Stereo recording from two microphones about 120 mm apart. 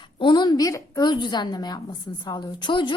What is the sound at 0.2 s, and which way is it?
A woman's voice, 40° left (ahead or behind).